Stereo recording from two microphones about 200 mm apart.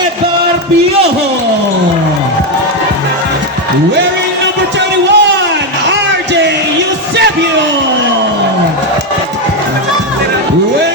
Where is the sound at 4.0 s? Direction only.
60° right (ahead or behind).